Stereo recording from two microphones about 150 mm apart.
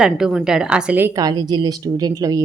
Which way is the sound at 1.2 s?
25° right (ahead or behind).